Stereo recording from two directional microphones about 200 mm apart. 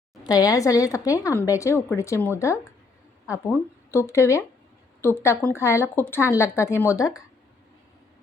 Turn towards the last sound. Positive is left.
turn(degrees=15)  # may be behind; listen again after turning